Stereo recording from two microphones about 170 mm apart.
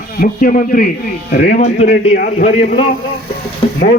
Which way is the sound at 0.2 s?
55° left (ahead or behind).